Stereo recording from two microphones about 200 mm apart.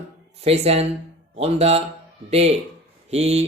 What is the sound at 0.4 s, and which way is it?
Speech, 30° right (ahead or behind).